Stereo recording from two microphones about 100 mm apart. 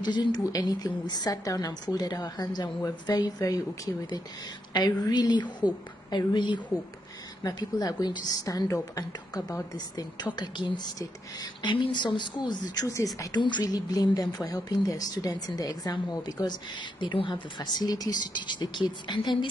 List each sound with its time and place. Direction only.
0.0 s a woman's voice: 45° left (ahead or behind)
7.4 s a woman's voice: 40° left (ahead or behind)
12.8 s a woman's voice: 30° left (ahead or behind)
13.3 s a woman's voice: 50° left (ahead or behind)
17.0 s speech: 55° left (ahead or behind)